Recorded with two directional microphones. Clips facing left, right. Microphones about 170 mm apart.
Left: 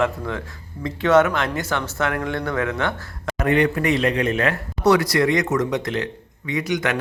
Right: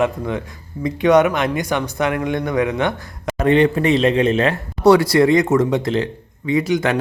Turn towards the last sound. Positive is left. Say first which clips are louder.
# right 6 dB
turn(degrees=-30)  # may be behind; listen again after turning